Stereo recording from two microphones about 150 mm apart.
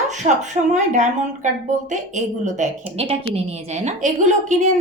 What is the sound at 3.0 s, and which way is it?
A woman's voice, 40° right (ahead or behind).